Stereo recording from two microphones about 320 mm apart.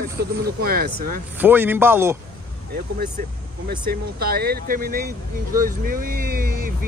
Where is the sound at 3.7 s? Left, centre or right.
Right.